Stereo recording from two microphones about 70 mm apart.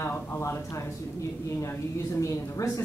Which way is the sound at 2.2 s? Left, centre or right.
Left.